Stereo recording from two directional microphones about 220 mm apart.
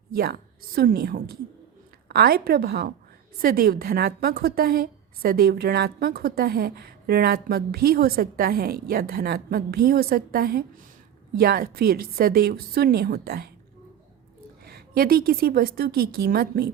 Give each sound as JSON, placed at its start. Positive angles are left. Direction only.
{"t": 0.1, "sound": "a woman's voice", "side_deg": -45}
{"t": 14.6, "sound": "a woman's voice", "side_deg": -45}